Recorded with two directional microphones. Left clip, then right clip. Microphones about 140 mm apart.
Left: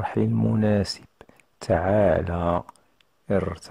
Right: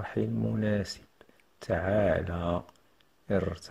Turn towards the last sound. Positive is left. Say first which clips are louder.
# left 5 dB
turn(degrees=35)  # may be behind; listen again after turning